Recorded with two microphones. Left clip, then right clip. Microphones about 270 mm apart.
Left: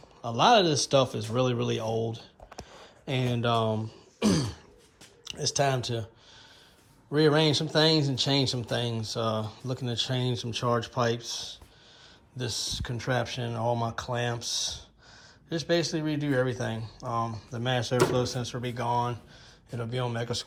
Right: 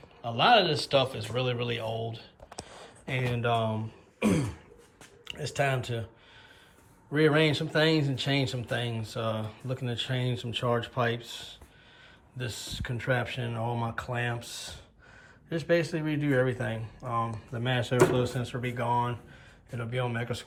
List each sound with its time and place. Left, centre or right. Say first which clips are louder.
0.2 s speech: left 1 dB; centre
5.2 s speech: left 3 dB; centre
7.1 s speech: left 1 dB; centre